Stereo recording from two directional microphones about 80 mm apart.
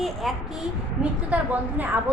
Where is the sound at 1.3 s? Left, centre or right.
Centre.